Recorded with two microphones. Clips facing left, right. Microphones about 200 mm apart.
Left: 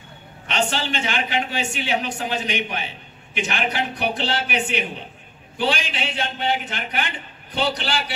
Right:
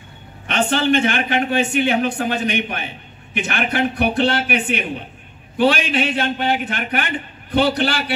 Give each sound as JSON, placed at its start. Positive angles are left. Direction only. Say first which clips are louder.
{"t": 0.5, "sound": "speech", "louder": "right 7 dB", "side_deg": -55}